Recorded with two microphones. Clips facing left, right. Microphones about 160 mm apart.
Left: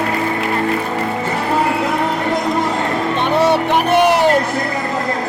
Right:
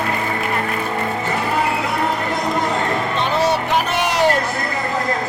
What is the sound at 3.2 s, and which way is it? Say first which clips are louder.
Music: left 5 dB; 60° left (ahead or behind).